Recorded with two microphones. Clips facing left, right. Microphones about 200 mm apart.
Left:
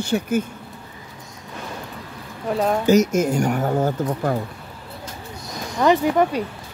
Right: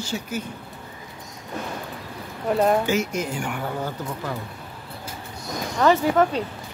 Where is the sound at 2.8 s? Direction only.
45° left (ahead or behind).